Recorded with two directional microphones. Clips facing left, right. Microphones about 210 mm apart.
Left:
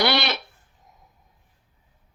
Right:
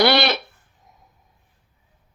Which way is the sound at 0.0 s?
35° right (ahead or behind).